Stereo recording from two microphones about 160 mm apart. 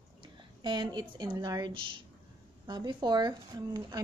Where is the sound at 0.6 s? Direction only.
30° right (ahead or behind).